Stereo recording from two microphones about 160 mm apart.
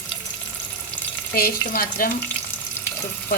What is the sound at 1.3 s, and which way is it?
Speech, 65° left (ahead or behind).